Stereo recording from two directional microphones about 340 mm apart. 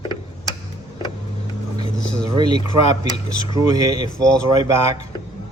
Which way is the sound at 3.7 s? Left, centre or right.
Centre.